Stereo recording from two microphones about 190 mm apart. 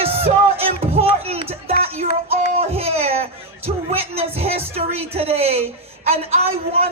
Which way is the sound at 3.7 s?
30° right (ahead or behind).